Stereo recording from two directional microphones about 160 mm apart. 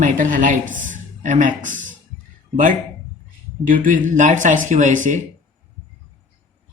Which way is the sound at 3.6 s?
60° right (ahead or behind).